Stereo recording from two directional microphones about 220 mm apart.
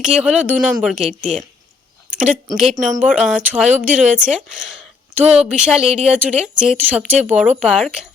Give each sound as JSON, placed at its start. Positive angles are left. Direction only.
{"t": 0.0, "sound": "speech", "side_deg": -5}
{"t": 1.2, "sound": "speech", "side_deg": -35}
{"t": 2.0, "sound": "a sound", "side_deg": -5}
{"t": 2.9, "sound": "speech", "side_deg": -5}
{"t": 3.8, "sound": "speech", "side_deg": -35}
{"t": 4.2, "sound": "speech", "side_deg": -5}